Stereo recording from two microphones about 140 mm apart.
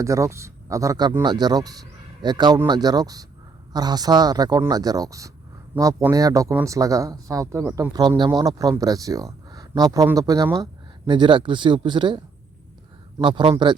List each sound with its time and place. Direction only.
0.0 s speech: 20° right (ahead or behind)
7.9 s speech: 35° right (ahead or behind)
13.2 s speech: 35° right (ahead or behind)